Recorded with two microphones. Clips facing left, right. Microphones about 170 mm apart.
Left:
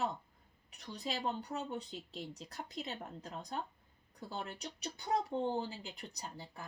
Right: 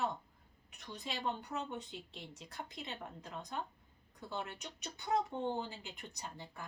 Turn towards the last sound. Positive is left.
turn(degrees=35)  # may be behind; listen again after turning